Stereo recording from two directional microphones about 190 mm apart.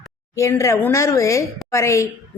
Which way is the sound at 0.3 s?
15° left (ahead or behind).